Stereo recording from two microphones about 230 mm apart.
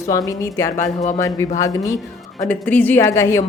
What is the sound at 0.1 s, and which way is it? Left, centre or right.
Speech, centre.